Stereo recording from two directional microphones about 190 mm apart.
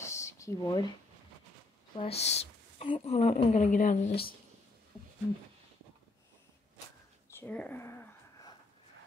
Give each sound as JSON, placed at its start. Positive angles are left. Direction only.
{"t": 0.0, "sound": "a sound", "side_deg": 15}
{"t": 2.0, "sound": "a woman's voice", "side_deg": 30}
{"t": 7.2, "sound": "speech", "side_deg": 10}